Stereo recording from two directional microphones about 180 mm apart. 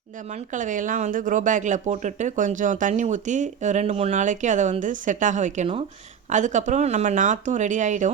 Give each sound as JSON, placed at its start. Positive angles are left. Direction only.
{"t": 0.3, "sound": "speech", "side_deg": -45}